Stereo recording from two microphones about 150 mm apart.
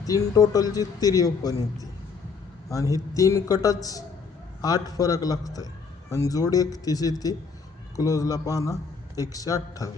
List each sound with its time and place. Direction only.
0.0 s a man's voice: 25° left (ahead or behind)